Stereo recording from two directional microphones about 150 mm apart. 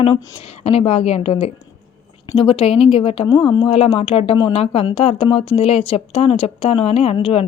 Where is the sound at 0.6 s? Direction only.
40° left (ahead or behind).